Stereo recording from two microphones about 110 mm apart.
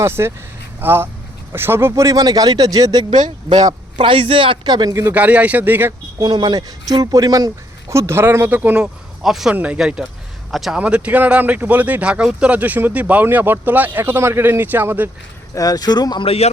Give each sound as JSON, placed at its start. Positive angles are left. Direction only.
{"t": 0.0, "sound": "speech", "side_deg": -25}
{"t": 3.1, "sound": "speech", "side_deg": -90}
{"t": 3.7, "sound": "speech", "side_deg": -45}
{"t": 4.9, "sound": "speech", "side_deg": -15}
{"t": 6.1, "sound": "speech", "side_deg": -40}
{"t": 8.8, "sound": "speech", "side_deg": -5}
{"t": 15.5, "sound": "speech", "side_deg": 35}
{"t": 16.2, "sound": "speech", "side_deg": 65}